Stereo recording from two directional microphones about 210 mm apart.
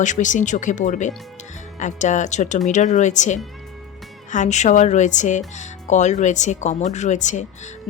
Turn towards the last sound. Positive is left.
turn(degrees=35)  # may be behind; listen again after turning